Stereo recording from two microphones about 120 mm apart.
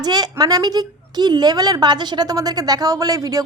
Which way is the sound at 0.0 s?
35° right (ahead or behind).